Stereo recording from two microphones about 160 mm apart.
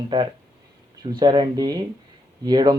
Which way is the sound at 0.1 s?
30° right (ahead or behind).